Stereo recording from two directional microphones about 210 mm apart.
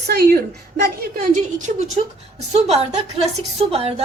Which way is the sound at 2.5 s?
30° right (ahead or behind).